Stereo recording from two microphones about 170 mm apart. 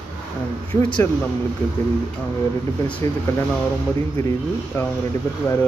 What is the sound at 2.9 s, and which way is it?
Speech, 15° left (ahead or behind).